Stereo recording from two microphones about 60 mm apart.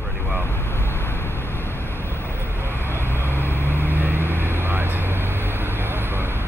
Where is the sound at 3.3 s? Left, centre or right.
Left.